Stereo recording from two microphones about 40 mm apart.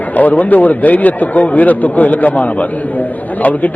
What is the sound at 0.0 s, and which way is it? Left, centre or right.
A man's voice, left.